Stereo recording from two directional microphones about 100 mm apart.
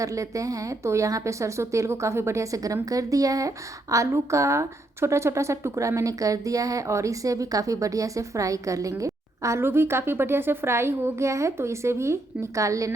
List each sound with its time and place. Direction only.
0.0 s a woman's voice: 35° right (ahead or behind)